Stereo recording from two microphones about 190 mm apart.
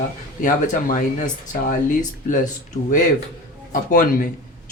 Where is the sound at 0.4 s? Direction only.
45° left (ahead or behind).